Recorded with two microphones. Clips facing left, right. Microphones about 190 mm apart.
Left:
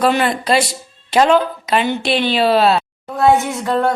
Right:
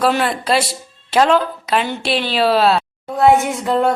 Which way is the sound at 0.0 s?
Centre (ahead or behind).